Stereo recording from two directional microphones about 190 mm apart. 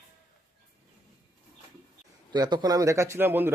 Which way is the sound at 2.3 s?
20° right (ahead or behind).